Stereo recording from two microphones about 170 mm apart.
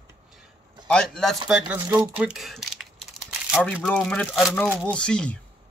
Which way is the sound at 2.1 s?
5° right (ahead or behind).